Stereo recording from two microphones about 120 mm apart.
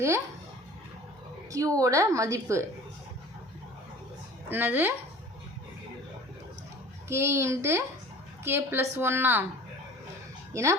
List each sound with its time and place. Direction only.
1.5 s a woman's voice: 30° right (ahead or behind)
4.4 s speech: 15° right (ahead or behind)
7.1 s a woman's voice: 20° right (ahead or behind)
10.5 s a woman's voice: 25° right (ahead or behind)